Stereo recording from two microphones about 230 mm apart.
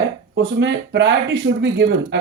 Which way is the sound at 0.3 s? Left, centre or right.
Right.